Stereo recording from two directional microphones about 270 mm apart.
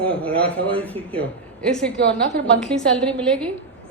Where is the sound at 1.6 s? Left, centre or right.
Centre.